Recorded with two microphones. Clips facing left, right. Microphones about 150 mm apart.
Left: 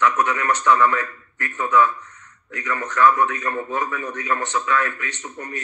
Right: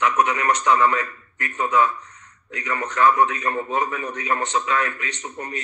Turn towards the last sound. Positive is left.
turn(degrees=-20)  # may be behind; listen again after turning